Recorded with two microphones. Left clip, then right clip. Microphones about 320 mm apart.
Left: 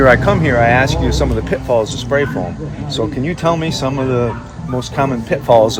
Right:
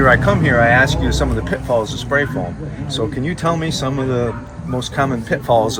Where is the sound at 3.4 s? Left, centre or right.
Centre.